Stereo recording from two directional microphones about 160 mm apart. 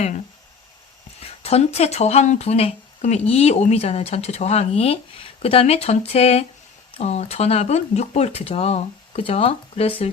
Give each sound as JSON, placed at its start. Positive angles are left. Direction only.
{"t": 1.2, "sound": "speech", "side_deg": 40}